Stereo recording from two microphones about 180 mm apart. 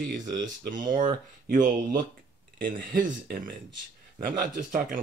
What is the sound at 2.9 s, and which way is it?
Speech, 50° right (ahead or behind).